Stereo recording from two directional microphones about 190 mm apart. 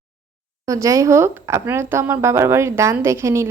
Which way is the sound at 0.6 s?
15° right (ahead or behind).